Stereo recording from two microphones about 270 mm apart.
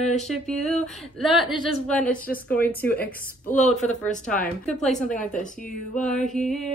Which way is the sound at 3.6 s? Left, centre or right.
Centre.